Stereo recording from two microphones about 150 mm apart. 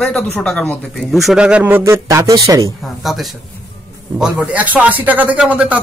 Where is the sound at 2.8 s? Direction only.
Centre (ahead or behind).